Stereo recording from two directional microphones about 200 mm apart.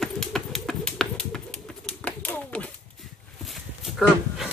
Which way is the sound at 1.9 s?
5° left (ahead or behind).